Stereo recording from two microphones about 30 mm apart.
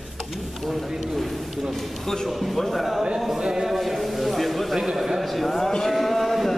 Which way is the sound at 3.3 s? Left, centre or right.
Centre.